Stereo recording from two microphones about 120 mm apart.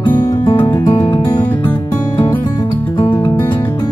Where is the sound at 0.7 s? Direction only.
30° left (ahead or behind).